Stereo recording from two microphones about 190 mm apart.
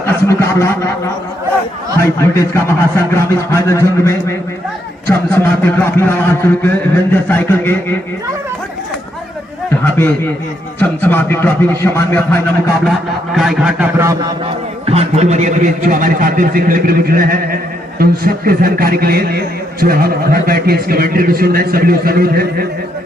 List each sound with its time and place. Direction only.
0.0 s speech: 15° left (ahead or behind)
2.0 s a man's voice: 15° left (ahead or behind)
9.8 s a man's voice: 10° left (ahead or behind)
12.8 s a sound: centre (ahead or behind)
14.8 s a man's voice: 35° right (ahead or behind); by 22.6 s 50° right (ahead or behind)